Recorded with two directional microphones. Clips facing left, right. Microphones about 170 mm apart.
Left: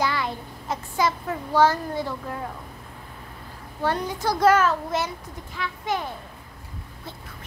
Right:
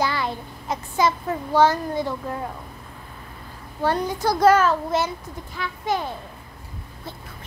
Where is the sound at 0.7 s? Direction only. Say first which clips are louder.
Right 3 dB; 25° right (ahead or behind).